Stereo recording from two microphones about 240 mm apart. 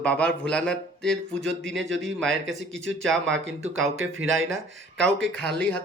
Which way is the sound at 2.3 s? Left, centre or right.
Right.